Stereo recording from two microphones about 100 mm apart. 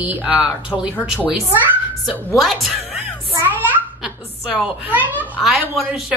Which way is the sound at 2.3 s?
Centre (ahead or behind).